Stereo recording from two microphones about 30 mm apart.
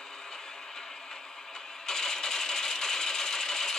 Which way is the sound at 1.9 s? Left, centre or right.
Centre.